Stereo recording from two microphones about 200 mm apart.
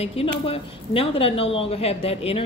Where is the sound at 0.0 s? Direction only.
30° left (ahead or behind).